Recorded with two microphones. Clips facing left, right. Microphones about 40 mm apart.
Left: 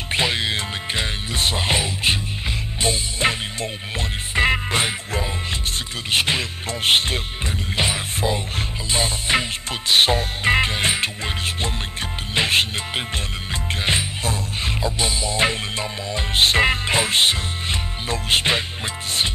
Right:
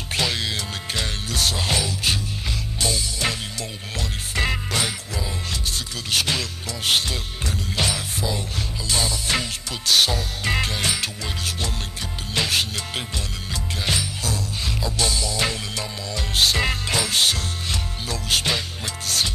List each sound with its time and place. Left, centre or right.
0.1 s music: left
4.4 s music: left